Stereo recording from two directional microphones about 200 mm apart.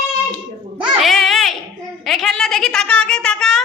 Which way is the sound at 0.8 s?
Centre (ahead or behind).